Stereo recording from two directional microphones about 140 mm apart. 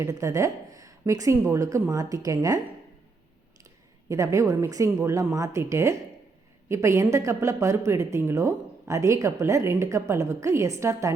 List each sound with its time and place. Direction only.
0.0 s speech: 20° right (ahead or behind)
4.1 s speech: 20° right (ahead or behind)